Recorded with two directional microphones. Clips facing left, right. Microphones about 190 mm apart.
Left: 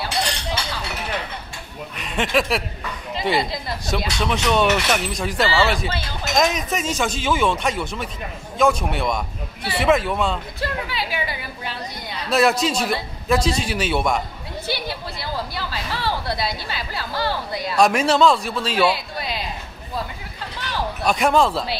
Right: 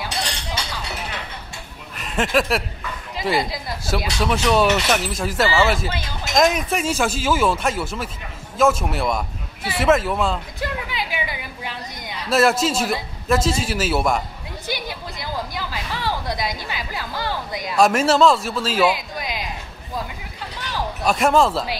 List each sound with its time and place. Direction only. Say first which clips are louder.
2.0 s speech: right 1 dB; centre (ahead or behind)
10.6 s a woman's voice: left 1 dB; 20° right (ahead or behind)
12.3 s speech: right 1 dB; 5° right (ahead or behind)
14.7 s a sound: left 1 dB; 15° right (ahead or behind)
17.7 s speech: right 1 dB; centre (ahead or behind)
18.9 s a sound: even; 15° right (ahead or behind)
21.0 s speech: right 1 dB; centre (ahead or behind)